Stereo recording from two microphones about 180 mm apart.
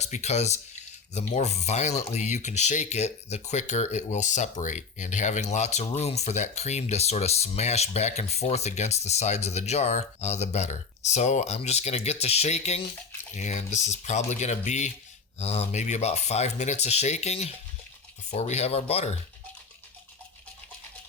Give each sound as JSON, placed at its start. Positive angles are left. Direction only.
{"t": 0.0, "sound": "speech", "side_deg": 40}